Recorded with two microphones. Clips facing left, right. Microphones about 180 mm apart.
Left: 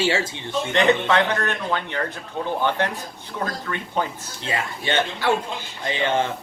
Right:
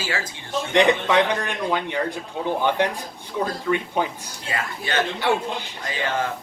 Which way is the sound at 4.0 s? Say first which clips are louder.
Left 3 dB; 10° right (ahead or behind).